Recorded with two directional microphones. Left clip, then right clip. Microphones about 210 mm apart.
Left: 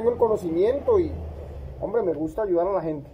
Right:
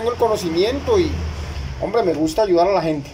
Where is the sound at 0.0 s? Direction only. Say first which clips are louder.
Right 3 dB; 15° right (ahead or behind).